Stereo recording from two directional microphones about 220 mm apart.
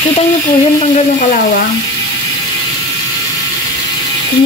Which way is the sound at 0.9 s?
35° left (ahead or behind).